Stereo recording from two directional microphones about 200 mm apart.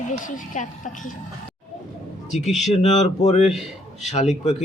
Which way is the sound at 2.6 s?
35° left (ahead or behind).